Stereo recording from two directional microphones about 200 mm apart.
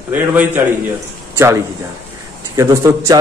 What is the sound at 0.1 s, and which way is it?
Speech, 10° right (ahead or behind).